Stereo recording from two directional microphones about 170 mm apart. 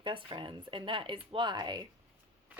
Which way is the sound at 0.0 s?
30° right (ahead or behind).